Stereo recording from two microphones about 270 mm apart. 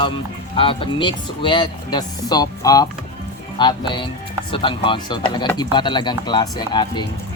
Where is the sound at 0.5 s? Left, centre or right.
Centre.